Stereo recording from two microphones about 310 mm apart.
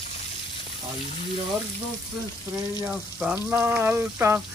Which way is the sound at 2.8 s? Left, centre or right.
Centre.